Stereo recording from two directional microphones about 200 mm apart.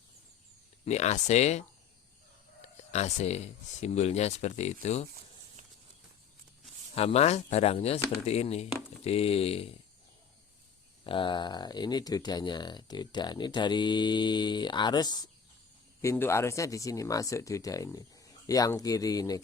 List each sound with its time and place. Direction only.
0.9 s speech: 35° left (ahead or behind)
6.9 s speech: 30° left (ahead or behind)
11.0 s speech: 25° left (ahead or behind)